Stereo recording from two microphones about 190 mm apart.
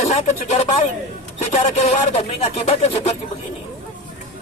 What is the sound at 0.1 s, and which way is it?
Speech, 35° left (ahead or behind).